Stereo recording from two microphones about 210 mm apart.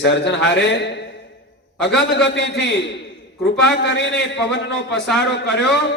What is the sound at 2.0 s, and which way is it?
A man's voice, 55° left (ahead or behind).